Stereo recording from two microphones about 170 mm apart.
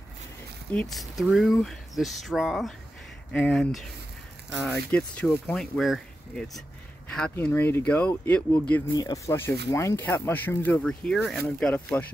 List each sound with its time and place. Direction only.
0.7 s speech: centre (ahead or behind)
8.9 s speech: 20° left (ahead or behind)